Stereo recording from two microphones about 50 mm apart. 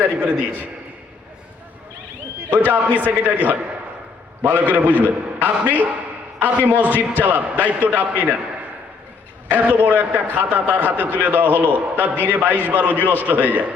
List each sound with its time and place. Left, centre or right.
0.0 s a man's voice: centre
3.0 s a man's voice: right
6.9 s a man's voice: left
7.3 s a man's voice: right
9.5 s a man's voice: right